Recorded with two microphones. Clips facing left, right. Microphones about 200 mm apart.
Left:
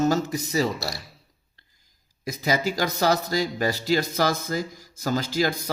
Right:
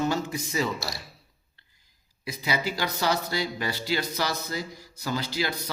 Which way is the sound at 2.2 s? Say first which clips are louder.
Left 5 dB; 45° left (ahead or behind).